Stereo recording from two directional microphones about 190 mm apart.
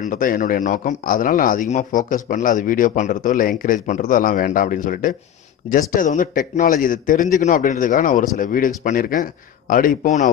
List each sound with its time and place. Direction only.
0.0 s a man's voice: 45° left (ahead or behind)